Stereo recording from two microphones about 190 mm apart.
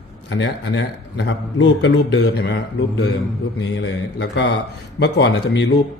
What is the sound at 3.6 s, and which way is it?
A man's voice, 65° left (ahead or behind).